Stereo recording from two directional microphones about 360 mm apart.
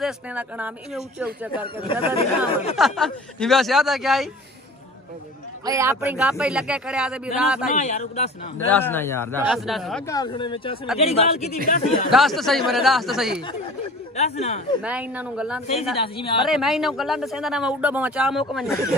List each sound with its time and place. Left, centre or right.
0.0 s speech: centre
1.8 s speech: centre
2.7 s speech: centre
5.7 s speech: centre
7.7 s speech: centre
8.7 s speech: centre
12.1 s speech: centre
14.1 s speech: centre
14.8 s speech: centre